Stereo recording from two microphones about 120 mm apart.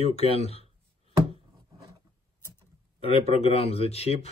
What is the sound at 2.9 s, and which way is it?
Speech, 50° left (ahead or behind).